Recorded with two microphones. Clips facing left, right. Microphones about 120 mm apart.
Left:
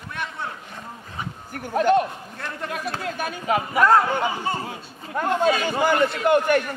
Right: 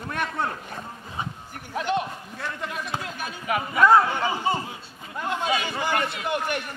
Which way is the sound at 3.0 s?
55° left (ahead or behind).